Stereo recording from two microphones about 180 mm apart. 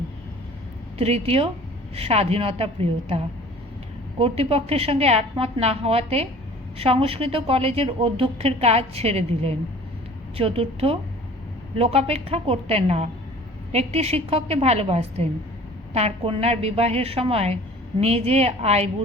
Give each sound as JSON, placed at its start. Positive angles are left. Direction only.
{"t": 0.9, "sound": "speech", "side_deg": -35}
{"t": 4.2, "sound": "speech", "side_deg": -35}